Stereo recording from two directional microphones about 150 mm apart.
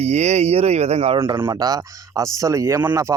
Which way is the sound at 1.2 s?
15° right (ahead or behind).